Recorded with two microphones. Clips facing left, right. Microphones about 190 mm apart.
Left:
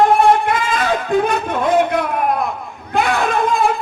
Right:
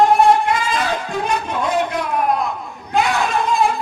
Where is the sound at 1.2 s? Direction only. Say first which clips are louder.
Left 4 dB; 55° left (ahead or behind).